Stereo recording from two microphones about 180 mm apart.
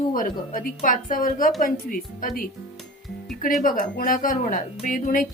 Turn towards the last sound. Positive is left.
turn(degrees=50)  # may be behind; listen again after turning